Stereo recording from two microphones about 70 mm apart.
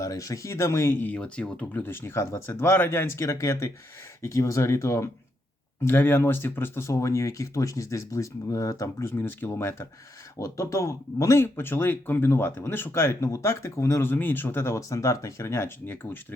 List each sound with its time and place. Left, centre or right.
0.0 s speech: left
1.0 s speech: centre
1.7 s speech: left
5.8 s speech: left
11.4 s speech: left
14.8 s speech: left